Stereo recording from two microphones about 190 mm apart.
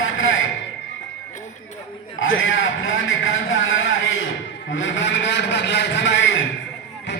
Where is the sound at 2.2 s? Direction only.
90° left.